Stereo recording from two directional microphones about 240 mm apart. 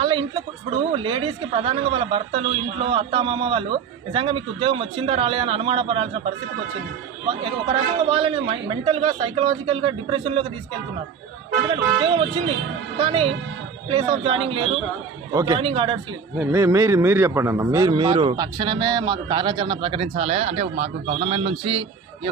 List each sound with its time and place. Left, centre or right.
0.0 s a sound: centre
0.9 s a man's voice: right
7.4 s a man's voice: right
11.7 s a man's voice: right
16.4 s a man's voice: centre